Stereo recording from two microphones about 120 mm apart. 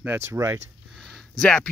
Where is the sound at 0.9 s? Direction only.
5° left (ahead or behind).